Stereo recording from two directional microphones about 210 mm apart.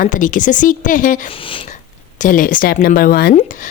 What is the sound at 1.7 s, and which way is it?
Speech, 35° left (ahead or behind).